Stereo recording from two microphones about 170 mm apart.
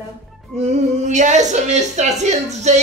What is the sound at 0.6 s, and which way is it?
A woman's voice, 45° right (ahead or behind).